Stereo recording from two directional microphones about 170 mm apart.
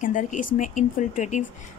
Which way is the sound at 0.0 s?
50° left (ahead or behind).